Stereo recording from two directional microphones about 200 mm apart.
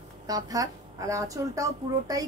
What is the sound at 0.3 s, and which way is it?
A woman's voice, 15° right (ahead or behind).